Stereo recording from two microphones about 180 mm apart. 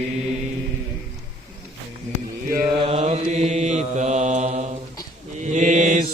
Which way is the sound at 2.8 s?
35° right (ahead or behind).